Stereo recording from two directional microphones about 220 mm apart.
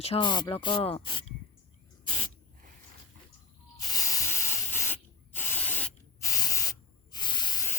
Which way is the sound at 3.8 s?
15° left (ahead or behind).